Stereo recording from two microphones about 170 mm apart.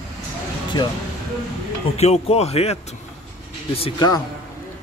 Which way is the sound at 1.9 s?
40° left (ahead or behind).